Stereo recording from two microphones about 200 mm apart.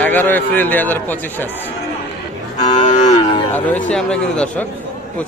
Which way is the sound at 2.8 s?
35° left (ahead or behind).